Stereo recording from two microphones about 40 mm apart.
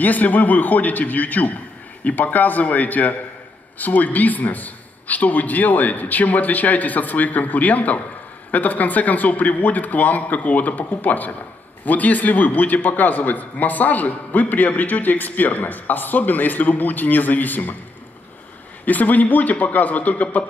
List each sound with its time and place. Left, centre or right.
0.0 s a man's voice: left
18.9 s a man's voice: left